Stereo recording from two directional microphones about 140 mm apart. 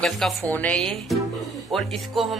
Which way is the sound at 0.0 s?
5° left (ahead or behind).